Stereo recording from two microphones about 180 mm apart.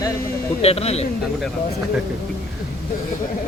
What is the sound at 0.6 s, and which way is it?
Speech, 35° left (ahead or behind).